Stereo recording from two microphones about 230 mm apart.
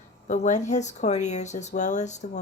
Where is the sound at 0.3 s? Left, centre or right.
Left.